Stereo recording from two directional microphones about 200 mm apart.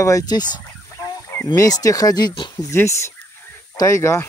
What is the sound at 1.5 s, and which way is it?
Speech, 20° left (ahead or behind).